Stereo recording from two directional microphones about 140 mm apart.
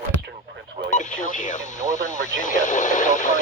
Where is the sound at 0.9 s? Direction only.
65° left (ahead or behind).